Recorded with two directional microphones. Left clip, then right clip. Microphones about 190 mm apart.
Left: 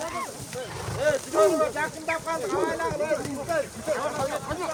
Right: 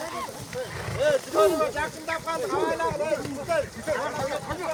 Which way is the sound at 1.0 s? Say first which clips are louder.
Even; 50° right (ahead or behind).